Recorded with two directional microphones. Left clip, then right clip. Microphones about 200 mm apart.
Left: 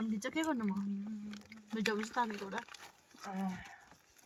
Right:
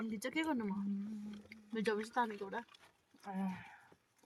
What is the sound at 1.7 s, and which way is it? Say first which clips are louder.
Speech: left 1 dB; 20° right (ahead or behind).